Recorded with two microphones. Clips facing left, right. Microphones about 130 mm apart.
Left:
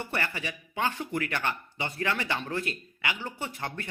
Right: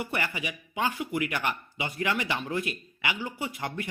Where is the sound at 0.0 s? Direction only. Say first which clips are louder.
Right 1 dB; 15° right (ahead or behind).